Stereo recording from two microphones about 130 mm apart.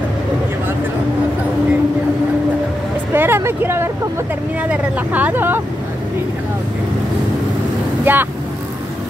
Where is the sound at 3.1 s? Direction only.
15° right (ahead or behind).